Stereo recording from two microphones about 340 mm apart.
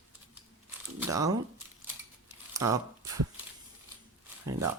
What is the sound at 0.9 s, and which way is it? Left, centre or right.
Speech, centre.